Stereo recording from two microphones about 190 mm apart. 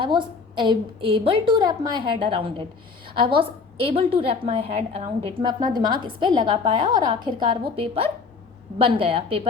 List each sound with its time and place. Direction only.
0.0 s a woman's voice: 25° right (ahead or behind)